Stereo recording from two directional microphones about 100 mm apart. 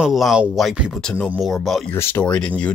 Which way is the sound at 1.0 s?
10° left (ahead or behind).